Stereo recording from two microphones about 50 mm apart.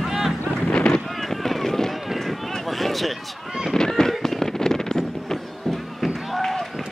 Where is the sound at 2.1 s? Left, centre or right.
Centre.